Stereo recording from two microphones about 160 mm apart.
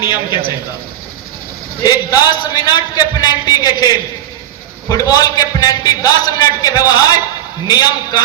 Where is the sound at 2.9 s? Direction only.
25° left (ahead or behind).